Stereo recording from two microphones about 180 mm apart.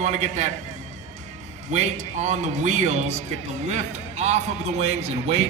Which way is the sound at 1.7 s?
40° right (ahead or behind).